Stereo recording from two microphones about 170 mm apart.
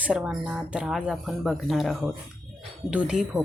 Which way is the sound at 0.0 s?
5° right (ahead or behind).